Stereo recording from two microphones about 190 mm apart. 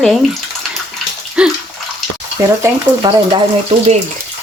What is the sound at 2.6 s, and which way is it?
Speech, 20° right (ahead or behind).